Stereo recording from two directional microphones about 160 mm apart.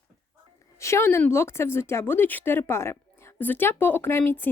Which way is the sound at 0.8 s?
15° left (ahead or behind).